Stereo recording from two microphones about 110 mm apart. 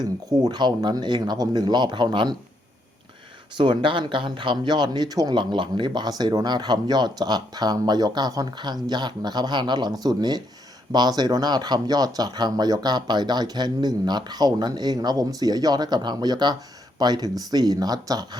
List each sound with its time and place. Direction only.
0.0 s speech: 40° right (ahead or behind)
3.5 s speech: 45° right (ahead or behind)